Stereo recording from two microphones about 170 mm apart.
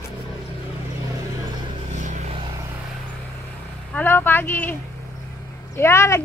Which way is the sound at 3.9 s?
10° left (ahead or behind).